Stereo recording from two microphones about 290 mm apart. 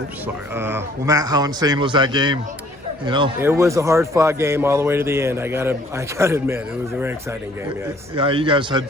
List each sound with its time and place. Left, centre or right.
0.5 s a man's voice: centre
8.1 s a man's voice: centre